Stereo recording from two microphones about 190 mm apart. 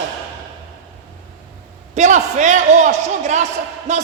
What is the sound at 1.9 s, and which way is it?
A man's voice, 40° right (ahead or behind).